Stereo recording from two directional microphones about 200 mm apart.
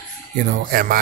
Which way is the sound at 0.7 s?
50° right (ahead or behind).